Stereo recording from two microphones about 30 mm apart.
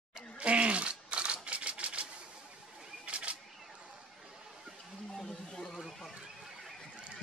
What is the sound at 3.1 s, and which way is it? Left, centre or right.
Single-lens reflex camera, right.